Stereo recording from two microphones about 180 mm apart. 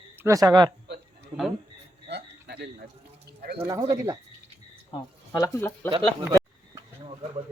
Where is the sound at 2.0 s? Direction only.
65° right (ahead or behind).